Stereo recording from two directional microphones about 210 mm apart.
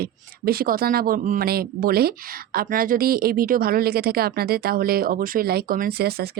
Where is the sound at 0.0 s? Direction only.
45° right (ahead or behind).